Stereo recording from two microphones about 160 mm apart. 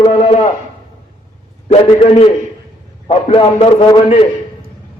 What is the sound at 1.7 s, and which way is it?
A man's voice, 35° left (ahead or behind).